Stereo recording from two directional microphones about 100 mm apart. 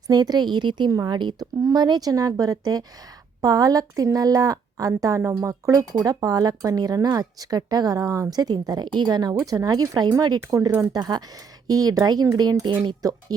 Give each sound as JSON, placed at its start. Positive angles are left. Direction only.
{"t": 0.1, "sound": "a woman's voice", "side_deg": -45}